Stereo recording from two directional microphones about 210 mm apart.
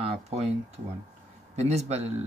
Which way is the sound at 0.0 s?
30° right (ahead or behind).